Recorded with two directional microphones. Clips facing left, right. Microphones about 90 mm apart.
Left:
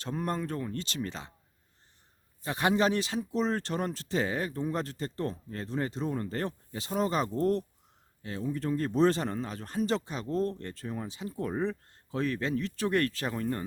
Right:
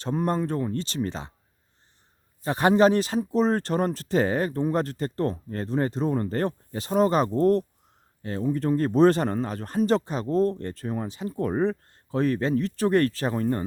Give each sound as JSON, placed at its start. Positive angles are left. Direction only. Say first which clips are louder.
{"t": 0.0, "sound": "speech", "louder": "right 7 dB", "side_deg": -30}
{"t": 2.4, "sound": "speech", "louder": "right 8 dB", "side_deg": -40}
{"t": 10.8, "sound": "speech", "louder": "right 6 dB", "side_deg": -50}